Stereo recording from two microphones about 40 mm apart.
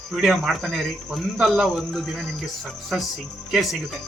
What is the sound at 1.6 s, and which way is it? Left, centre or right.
Speech, centre.